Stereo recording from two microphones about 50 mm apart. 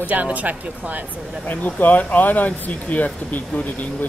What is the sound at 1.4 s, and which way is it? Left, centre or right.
Speech, left.